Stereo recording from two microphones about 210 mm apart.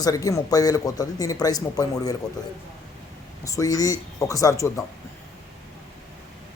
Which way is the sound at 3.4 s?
15° left (ahead or behind).